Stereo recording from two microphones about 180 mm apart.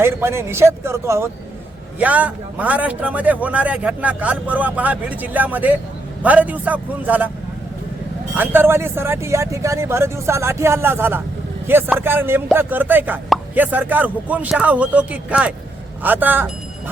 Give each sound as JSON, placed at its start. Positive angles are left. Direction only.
{"t": 0.0, "sound": "a man's voice", "side_deg": -15}
{"t": 8.4, "sound": "a man's voice", "side_deg": -10}